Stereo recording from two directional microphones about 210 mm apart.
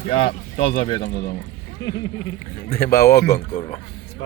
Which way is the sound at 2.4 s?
45° left (ahead or behind).